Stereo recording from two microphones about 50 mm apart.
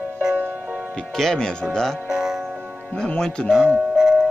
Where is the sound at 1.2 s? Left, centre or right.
Centre.